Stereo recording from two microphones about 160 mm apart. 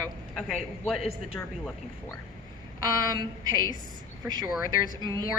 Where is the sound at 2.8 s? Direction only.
25° right (ahead or behind).